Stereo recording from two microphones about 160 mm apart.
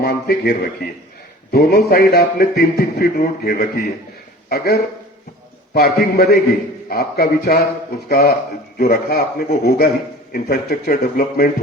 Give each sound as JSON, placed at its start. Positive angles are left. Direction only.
{"t": 0.0, "sound": "a man's voice", "side_deg": 80}
{"t": 1.5, "sound": "a man's voice", "side_deg": 70}